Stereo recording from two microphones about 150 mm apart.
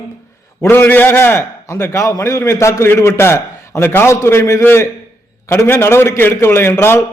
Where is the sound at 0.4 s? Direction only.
15° left (ahead or behind).